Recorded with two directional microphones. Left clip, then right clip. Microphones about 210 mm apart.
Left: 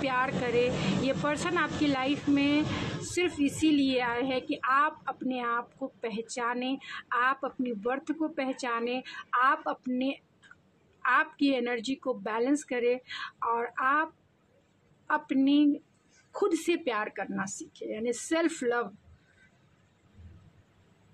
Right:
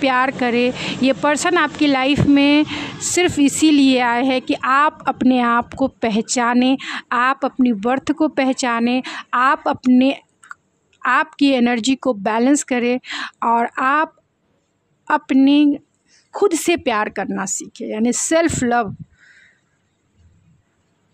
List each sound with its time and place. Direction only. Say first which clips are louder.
0.0 s speech: right 12 dB; 50° right (ahead or behind)